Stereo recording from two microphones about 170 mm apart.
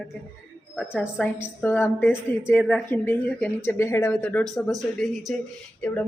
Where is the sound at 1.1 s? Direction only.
10° left (ahead or behind).